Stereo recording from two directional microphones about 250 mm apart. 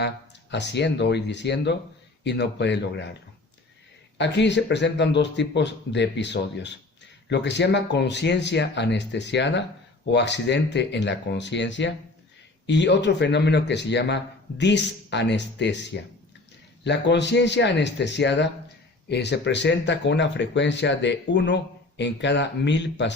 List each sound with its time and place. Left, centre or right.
0.5 s speech: left
4.2 s speech: left